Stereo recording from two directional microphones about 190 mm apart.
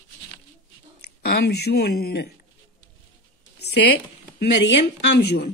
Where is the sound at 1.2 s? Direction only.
60° left (ahead or behind).